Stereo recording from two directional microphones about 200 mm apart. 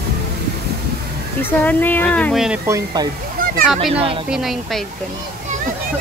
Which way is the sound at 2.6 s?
15° right (ahead or behind).